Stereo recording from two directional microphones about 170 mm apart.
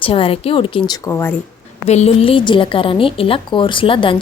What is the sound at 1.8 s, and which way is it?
A woman's voice, 40° left (ahead or behind).